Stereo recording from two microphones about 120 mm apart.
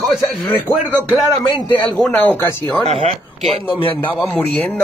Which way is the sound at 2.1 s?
15° left (ahead or behind).